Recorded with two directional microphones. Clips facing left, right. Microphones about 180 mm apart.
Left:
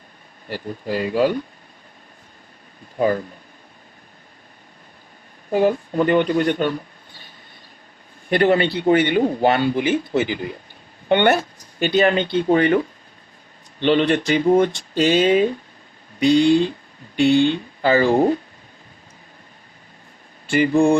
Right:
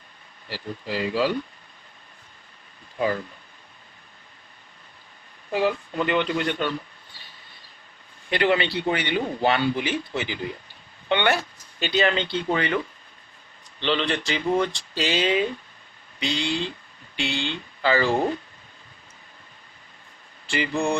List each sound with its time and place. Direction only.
0.4 s a man's voice: 50° left (ahead or behind)
3.0 s a man's voice: 45° left (ahead or behind)
5.5 s a man's voice: 50° left (ahead or behind)
8.3 s a man's voice: 45° left (ahead or behind)
20.5 s a man's voice: 50° left (ahead or behind)